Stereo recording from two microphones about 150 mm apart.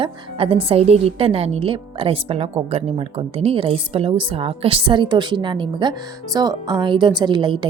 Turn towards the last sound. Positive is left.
turn(degrees=-30)  # may be behind; listen again after turning